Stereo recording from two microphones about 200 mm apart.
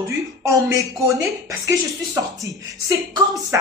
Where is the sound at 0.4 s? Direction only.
15° right (ahead or behind).